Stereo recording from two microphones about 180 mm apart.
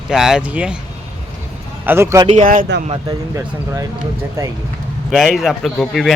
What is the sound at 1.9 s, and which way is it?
Speech, 15° right (ahead or behind).